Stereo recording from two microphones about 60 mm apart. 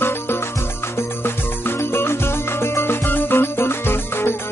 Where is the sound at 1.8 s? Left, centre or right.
Left.